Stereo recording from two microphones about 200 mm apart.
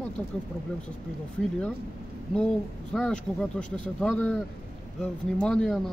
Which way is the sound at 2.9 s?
5° left (ahead or behind).